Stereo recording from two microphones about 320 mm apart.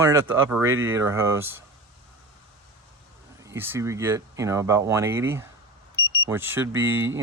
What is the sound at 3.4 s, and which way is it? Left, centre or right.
Speech, centre.